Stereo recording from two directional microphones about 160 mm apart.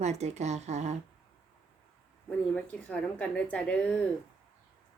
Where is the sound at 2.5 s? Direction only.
5° left (ahead or behind).